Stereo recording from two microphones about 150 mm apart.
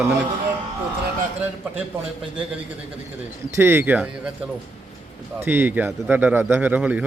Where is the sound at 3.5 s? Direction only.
15° right (ahead or behind).